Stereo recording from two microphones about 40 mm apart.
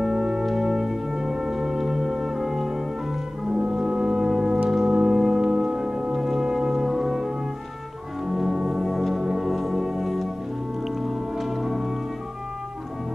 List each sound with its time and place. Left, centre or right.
0.0 s music: centre
3.4 s brass instrument: centre
4.6 s music: centre